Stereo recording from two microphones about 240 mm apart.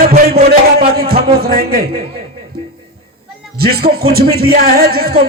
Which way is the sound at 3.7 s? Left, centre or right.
Right.